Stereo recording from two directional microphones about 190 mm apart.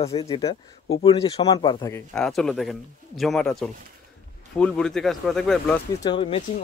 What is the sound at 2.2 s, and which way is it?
Speech, 5° left (ahead or behind).